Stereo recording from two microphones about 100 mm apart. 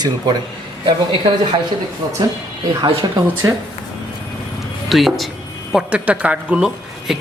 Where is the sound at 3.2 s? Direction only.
25° right (ahead or behind).